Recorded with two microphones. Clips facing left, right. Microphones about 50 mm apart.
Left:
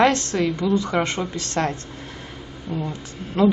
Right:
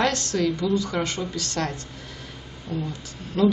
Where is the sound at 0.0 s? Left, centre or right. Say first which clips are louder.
Left 4 dB; left.